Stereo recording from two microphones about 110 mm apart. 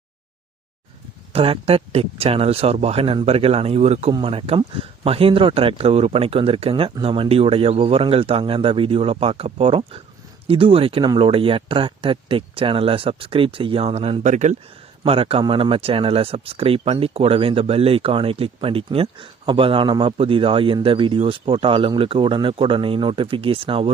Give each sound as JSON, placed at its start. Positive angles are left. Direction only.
{"t": 1.3, "sound": "speech", "side_deg": -60}
{"t": 4.2, "sound": "speech", "side_deg": -60}
{"t": 11.0, "sound": "speech", "side_deg": -40}
{"t": 11.3, "sound": "speech", "side_deg": -55}
{"t": 15.0, "sound": "speech", "side_deg": -60}